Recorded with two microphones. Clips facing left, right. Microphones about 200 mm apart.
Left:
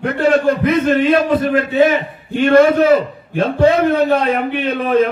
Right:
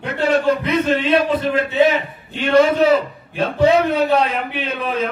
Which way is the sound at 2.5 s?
55° left (ahead or behind).